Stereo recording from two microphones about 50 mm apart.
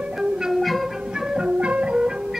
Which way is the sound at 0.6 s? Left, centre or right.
Centre.